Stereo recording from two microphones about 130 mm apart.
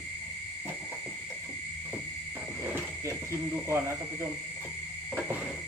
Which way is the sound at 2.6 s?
20° right (ahead or behind).